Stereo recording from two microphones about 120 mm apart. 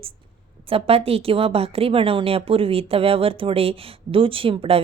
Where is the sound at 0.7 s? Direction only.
55° right (ahead or behind).